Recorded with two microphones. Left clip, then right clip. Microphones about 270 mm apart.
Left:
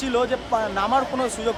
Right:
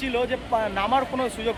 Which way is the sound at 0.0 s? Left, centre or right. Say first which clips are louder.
Left 3 dB; centre.